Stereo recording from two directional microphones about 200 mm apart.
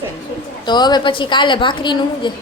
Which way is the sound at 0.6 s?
20° left (ahead or behind).